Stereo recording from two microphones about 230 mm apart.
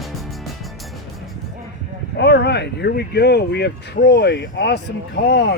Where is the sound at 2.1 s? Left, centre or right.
Left.